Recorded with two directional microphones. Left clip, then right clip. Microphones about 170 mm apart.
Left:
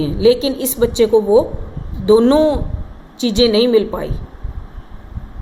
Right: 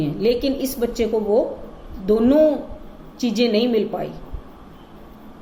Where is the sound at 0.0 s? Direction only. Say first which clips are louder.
Left 6 dB; 65° left (ahead or behind).